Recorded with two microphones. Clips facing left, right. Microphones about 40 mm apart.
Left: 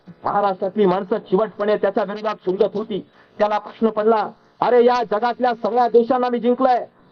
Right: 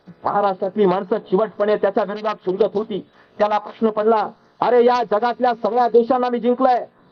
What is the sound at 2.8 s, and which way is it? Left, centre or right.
Speech, centre.